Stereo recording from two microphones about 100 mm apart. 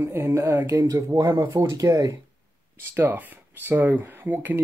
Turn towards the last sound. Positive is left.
turn(degrees=-20)  # may be behind; listen again after turning